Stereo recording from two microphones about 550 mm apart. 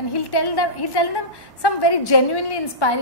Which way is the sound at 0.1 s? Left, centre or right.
Left.